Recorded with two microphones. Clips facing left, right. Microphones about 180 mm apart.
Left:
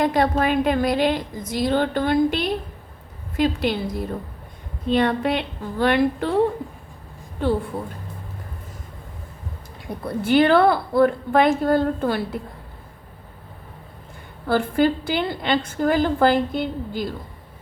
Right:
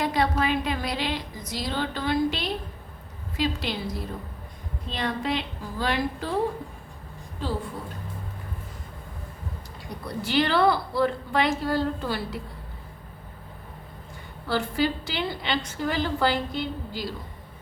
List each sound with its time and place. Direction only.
0.0 s a woman's voice: 50° left (ahead or behind)
7.4 s a woman's voice: 60° left (ahead or behind)
10.1 s a woman's voice: 55° left (ahead or behind)
14.4 s a woman's voice: 50° left (ahead or behind)